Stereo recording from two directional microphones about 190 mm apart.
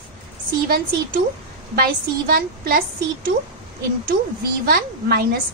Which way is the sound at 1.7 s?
50° right (ahead or behind).